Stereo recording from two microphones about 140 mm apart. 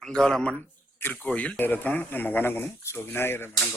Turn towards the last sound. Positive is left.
turn(degrees=20)  # may be behind; listen again after turning